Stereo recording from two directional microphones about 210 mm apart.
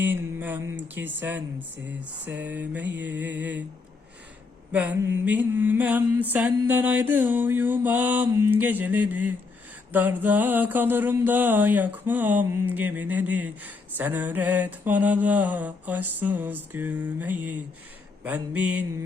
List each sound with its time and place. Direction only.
0.0 s mantra: 10° right (ahead or behind)
2.0 s a sound: 60° right (ahead or behind)
2.4 s mantra: 10° right (ahead or behind)
4.7 s mantra: 10° right (ahead or behind)